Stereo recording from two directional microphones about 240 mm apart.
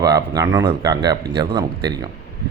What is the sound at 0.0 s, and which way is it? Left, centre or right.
Speech, centre.